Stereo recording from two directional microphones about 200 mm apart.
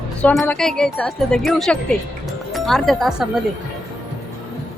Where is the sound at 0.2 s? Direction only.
10° left (ahead or behind).